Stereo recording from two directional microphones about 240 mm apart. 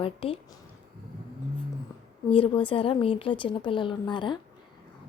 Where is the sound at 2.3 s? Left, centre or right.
Left.